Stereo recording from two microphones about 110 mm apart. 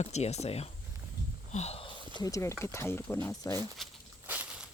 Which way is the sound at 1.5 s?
80° left.